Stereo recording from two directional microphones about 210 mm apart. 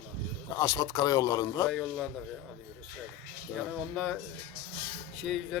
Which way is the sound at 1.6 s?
Centre (ahead or behind).